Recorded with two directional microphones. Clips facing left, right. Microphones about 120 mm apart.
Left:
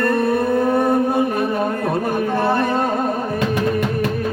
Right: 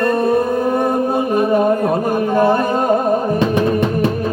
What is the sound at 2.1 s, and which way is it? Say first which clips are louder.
Music: right 5 dB; 15° right (ahead or behind).